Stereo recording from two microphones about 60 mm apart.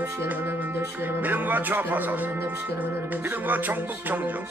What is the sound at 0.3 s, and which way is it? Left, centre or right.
Music, right.